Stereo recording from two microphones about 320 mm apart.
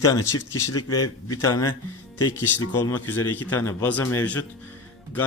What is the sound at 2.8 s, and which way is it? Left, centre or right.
A man's voice, centre.